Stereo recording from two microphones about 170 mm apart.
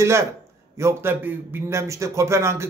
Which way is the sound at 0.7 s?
15° right (ahead or behind).